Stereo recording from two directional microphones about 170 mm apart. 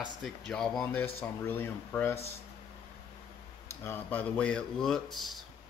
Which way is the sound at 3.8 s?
10° left (ahead or behind).